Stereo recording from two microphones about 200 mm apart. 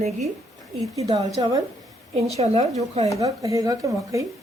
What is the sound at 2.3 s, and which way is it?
Speech, 35° right (ahead or behind).